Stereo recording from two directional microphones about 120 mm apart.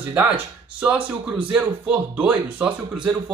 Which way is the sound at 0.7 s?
15° right (ahead or behind).